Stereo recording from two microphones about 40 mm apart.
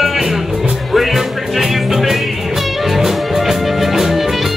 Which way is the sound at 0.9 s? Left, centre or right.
Centre.